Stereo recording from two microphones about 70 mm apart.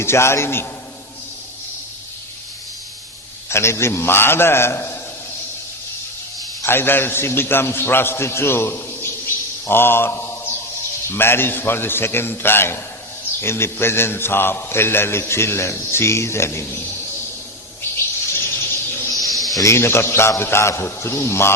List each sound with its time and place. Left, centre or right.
0.0 s a man's voice: left
3.5 s a man's voice: left
6.7 s a man's voice: left
17.9 s a sound: left
19.1 s snake: centre
19.6 s a man's voice: left